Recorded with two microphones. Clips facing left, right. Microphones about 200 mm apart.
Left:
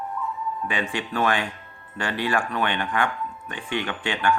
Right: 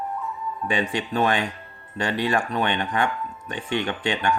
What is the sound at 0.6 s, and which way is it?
Speech, 25° right (ahead or behind).